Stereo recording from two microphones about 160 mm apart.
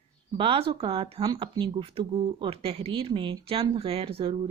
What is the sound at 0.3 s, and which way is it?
Speech, 35° right (ahead or behind).